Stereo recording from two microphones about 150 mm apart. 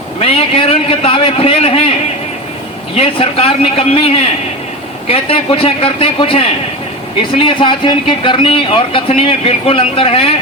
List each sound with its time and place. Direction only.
0.2 s speech: 40° left (ahead or behind)
2.9 s speech: 40° left (ahead or behind)